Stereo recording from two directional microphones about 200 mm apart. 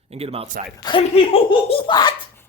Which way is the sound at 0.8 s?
25° left (ahead or behind).